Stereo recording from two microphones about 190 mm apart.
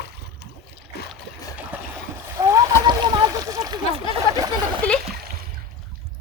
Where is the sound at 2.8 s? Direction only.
20° right (ahead or behind).